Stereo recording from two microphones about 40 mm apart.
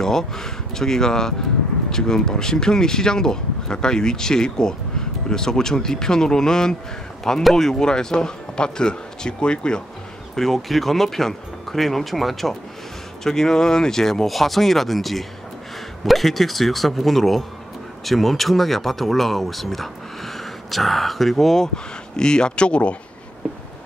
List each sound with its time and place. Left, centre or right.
0.0 s a man's voice: centre
10.3 s speech: centre
22.1 s a man's voice: centre